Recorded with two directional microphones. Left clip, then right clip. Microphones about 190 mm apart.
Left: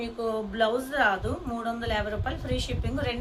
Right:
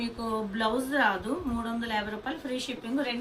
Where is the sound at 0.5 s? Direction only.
60° left (ahead or behind).